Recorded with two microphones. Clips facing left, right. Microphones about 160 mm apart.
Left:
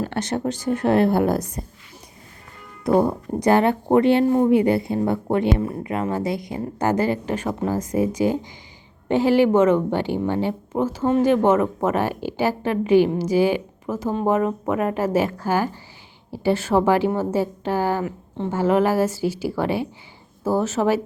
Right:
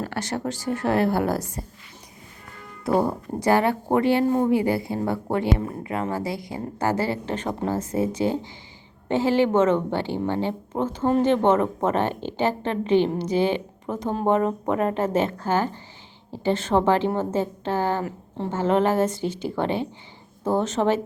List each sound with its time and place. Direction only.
0.0 s speech: 20° left (ahead or behind)
2.8 s a woman's voice: 20° left (ahead or behind)